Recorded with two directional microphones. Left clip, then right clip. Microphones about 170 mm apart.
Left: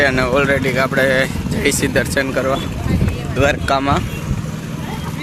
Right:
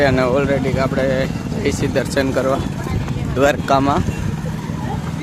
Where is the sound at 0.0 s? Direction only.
15° right (ahead or behind).